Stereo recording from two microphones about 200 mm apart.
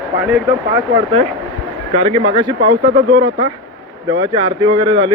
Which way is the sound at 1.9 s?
30° right (ahead or behind).